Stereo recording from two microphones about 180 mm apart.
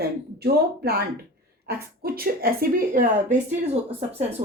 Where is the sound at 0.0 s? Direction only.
60° right (ahead or behind).